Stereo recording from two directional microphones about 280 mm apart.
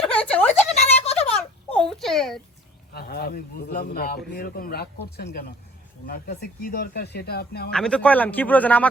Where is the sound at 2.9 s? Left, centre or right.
Left.